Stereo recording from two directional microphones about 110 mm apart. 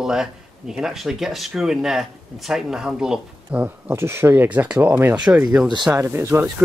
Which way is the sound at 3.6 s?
20° right (ahead or behind).